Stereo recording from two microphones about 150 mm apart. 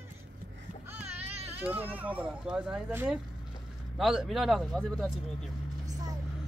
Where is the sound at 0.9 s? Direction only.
45° right (ahead or behind).